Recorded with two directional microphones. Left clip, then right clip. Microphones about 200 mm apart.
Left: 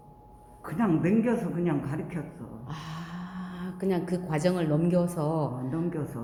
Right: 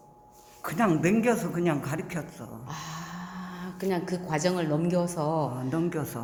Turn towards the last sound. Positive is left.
turn(degrees=-60)  # may be behind; listen again after turning